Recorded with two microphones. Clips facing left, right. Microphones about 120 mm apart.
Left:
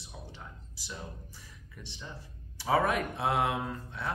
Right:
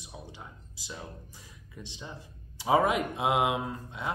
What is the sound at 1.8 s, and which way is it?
Speech, 15° right (ahead or behind).